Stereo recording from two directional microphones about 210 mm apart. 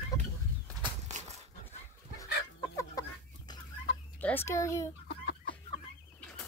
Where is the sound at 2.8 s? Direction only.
15° left (ahead or behind).